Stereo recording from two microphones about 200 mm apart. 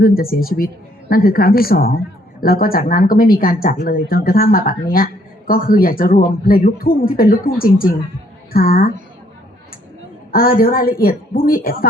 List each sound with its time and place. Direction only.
0.0 s a woman's voice: 50° left (ahead or behind)
10.3 s a woman's voice: 45° left (ahead or behind)